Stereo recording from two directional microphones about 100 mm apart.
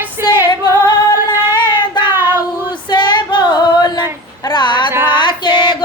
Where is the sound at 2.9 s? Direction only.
50° left (ahead or behind).